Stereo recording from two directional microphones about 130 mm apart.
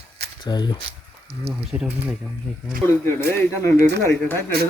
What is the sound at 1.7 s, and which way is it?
Speech, 15° right (ahead or behind).